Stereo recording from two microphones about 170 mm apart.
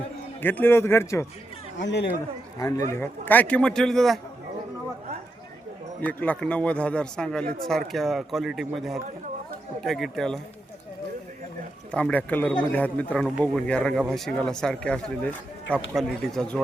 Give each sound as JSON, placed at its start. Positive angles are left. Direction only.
{"t": 0.4, "sound": "speech", "side_deg": 10}
{"t": 1.8, "sound": "speech", "side_deg": 90}
{"t": 2.6, "sound": "a man's voice", "side_deg": 20}
{"t": 6.0, "sound": "a man's voice", "side_deg": 10}
{"t": 11.9, "sound": "a man's voice", "side_deg": 5}